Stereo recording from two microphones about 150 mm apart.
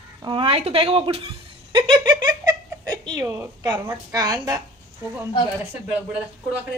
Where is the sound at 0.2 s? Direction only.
35° right (ahead or behind).